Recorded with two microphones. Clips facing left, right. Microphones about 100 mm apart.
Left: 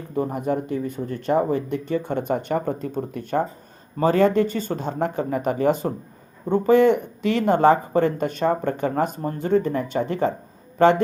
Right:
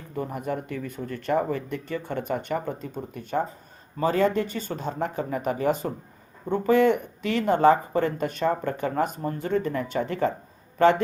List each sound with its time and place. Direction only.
0.2 s speech: 30° left (ahead or behind)